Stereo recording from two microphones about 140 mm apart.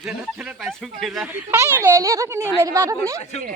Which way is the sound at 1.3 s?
15° right (ahead or behind).